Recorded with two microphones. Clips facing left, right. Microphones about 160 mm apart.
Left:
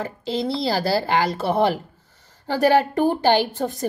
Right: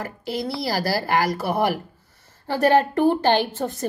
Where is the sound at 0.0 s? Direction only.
25° left (ahead or behind).